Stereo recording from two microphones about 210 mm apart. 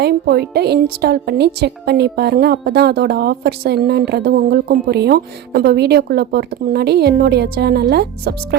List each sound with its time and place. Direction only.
0.0 s speech: 50° right (ahead or behind)